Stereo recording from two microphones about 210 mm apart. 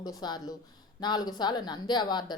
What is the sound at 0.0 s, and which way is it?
Speech, 20° left (ahead or behind).